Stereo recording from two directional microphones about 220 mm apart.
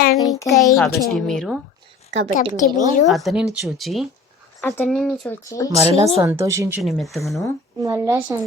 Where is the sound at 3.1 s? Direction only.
Centre (ahead or behind).